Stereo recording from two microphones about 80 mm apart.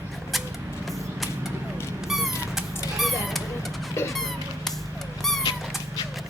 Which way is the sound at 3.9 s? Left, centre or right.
Left.